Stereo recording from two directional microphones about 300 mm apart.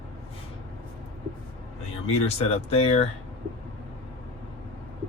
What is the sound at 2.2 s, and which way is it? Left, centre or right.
Speech, centre.